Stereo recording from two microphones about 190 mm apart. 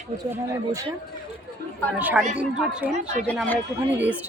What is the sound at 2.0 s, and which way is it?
Speech, 10° right (ahead or behind).